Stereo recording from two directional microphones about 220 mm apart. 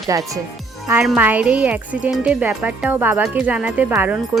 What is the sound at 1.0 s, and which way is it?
Speech, 5° right (ahead or behind).